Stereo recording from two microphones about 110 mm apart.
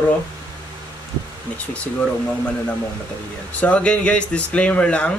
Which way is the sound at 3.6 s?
10° left (ahead or behind).